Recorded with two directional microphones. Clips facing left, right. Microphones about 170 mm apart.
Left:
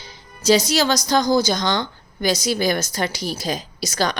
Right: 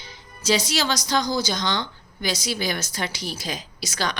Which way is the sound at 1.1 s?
45° left (ahead or behind).